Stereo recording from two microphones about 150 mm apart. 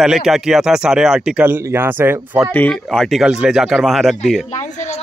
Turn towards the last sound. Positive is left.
turn(degrees=50)  # may be behind; listen again after turning